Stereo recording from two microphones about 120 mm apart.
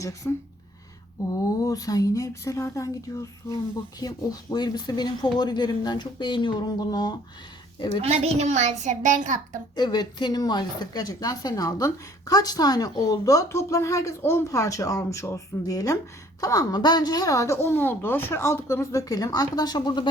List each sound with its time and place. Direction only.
0.0 s a woman's voice: 25° left (ahead or behind)
1.3 s a woman's voice: 30° left (ahead or behind)
8.0 s a child's voice: 60° right (ahead or behind); by 9.6 s 90° right
9.7 s a woman's voice: 35° left (ahead or behind)